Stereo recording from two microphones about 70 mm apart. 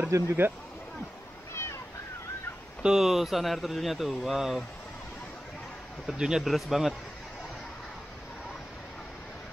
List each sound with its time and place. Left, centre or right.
0.1 s speech: right
1.5 s a sound: left
2.8 s speech: centre
6.0 s speech: centre